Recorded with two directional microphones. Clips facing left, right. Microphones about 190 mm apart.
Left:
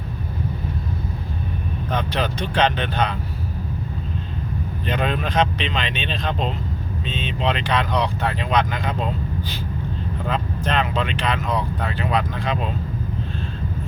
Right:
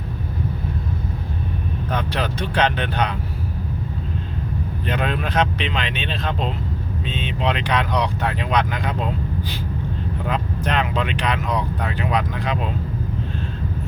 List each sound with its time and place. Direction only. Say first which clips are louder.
2.0 s speech: left 2 dB; 10° right (ahead or behind)
4.9 s speech: left 1 dB; 5° right (ahead or behind)
10.2 s speech: even; 10° right (ahead or behind)